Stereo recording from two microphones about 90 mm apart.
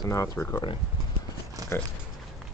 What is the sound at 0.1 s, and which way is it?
Speech, 35° left (ahead or behind).